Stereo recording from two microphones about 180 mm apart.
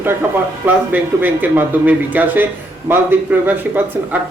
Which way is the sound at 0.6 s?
10° right (ahead or behind).